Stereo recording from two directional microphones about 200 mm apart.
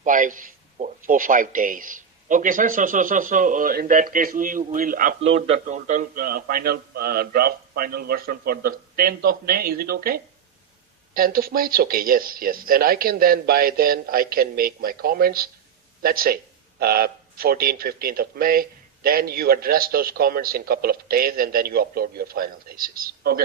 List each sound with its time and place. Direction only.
0.0 s a man's voice: 40° right (ahead or behind)
5.3 s a man's voice: 35° right (ahead or behind)